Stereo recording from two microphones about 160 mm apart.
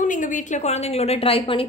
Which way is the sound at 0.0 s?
55° left (ahead or behind).